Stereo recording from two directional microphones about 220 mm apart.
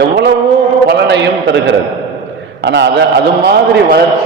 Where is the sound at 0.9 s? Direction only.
50° right (ahead or behind).